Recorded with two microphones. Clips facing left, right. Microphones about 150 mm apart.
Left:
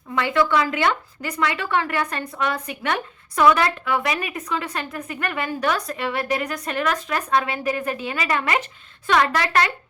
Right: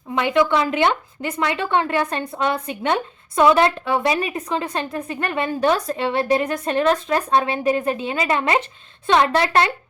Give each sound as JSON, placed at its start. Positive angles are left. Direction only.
{"t": 0.1, "sound": "a woman's voice", "side_deg": -20}